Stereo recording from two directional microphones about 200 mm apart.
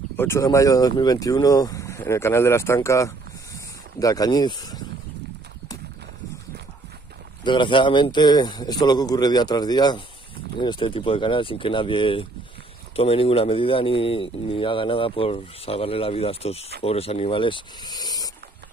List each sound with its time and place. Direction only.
0.2 s speech: 15° left (ahead or behind)
7.4 s speech: 25° left (ahead or behind)